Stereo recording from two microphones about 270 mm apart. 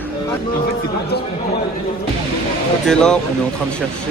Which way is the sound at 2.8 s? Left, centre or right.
Centre.